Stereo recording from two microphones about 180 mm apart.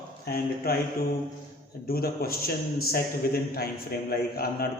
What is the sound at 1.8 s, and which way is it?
A man's voice, 55° left (ahead or behind).